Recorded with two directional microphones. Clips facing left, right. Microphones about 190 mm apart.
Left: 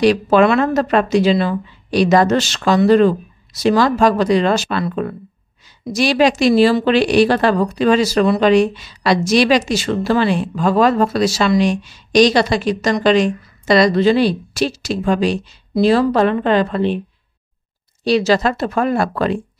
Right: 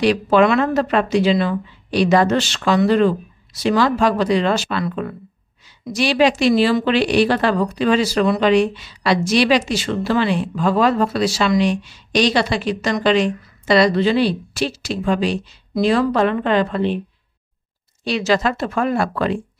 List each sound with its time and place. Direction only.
0.0 s a woman's voice: 40° left (ahead or behind)
18.0 s speech: 35° left (ahead or behind)